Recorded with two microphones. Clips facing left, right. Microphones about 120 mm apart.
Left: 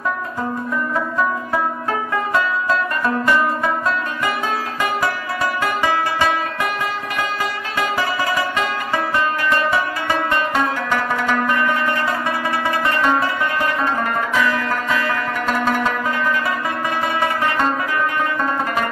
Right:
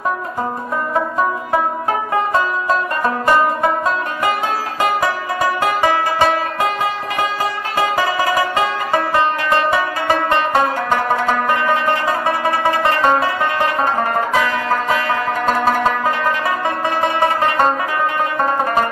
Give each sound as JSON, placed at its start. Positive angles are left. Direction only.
{"t": 3.0, "sound": "music", "side_deg": -25}
{"t": 7.7, "sound": "music", "side_deg": -15}
{"t": 10.0, "sound": "music", "side_deg": -45}
{"t": 11.4, "sound": "music", "side_deg": -20}
{"t": 12.8, "sound": "music", "side_deg": -30}
{"t": 17.2, "sound": "music", "side_deg": -30}